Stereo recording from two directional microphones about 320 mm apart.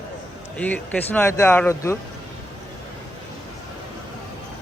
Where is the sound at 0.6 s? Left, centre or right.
Centre.